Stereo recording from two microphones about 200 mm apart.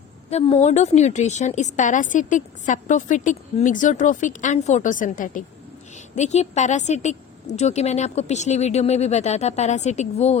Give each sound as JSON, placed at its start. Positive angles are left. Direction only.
{"t": 0.3, "sound": "a woman's voice", "side_deg": 30}